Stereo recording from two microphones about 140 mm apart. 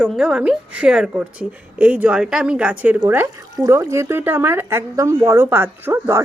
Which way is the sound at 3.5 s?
25° right (ahead or behind).